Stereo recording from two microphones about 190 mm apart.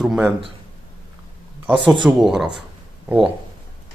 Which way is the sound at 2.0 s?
Centre (ahead or behind).